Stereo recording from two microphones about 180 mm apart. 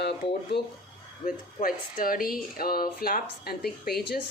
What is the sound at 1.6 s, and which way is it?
Speech, 40° left (ahead or behind).